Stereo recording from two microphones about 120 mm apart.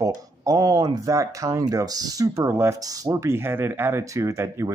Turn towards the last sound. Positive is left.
turn(degrees=-25)  # may be behind; listen again after turning